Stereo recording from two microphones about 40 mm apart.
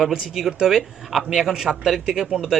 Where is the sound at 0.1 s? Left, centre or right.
Centre.